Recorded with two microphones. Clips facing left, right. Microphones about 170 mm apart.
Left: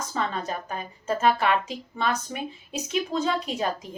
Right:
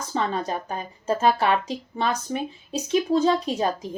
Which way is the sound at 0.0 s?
35° right (ahead or behind).